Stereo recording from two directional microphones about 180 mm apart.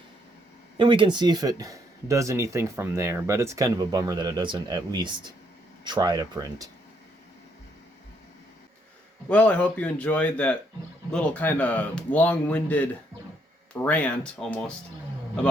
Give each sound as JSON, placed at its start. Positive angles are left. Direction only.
{"t": 0.8, "sound": "speech", "side_deg": -30}
{"t": 9.3, "sound": "a man's voice", "side_deg": 10}